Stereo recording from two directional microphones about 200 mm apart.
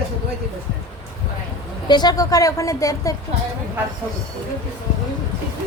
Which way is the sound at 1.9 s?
20° left (ahead or behind).